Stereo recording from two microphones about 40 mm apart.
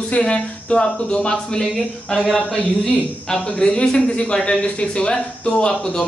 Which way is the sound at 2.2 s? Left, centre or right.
Centre.